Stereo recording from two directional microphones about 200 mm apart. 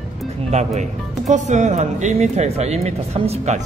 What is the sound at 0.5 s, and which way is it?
Speech, 35° right (ahead or behind).